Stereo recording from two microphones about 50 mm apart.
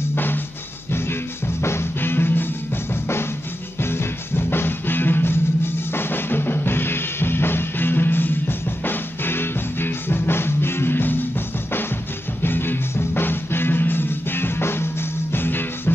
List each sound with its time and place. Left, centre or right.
0.1 s music: left
1.6 s music: left
2.9 s drum kit: left
3.8 s music: left
5.9 s drum kit: left
12.4 s music: left